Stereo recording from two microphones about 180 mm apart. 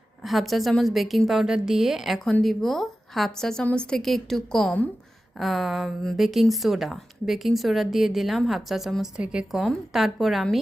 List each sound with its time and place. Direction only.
0.2 s a woman's voice: centre (ahead or behind)